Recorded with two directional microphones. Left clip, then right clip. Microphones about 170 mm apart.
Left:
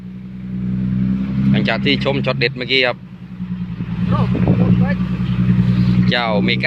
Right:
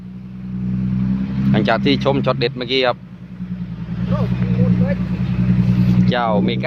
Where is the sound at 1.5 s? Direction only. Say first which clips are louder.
Right 1 dB; 15° right (ahead or behind).